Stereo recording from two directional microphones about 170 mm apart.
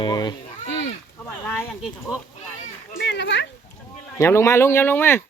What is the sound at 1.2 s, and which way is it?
Speech, 10° left (ahead or behind).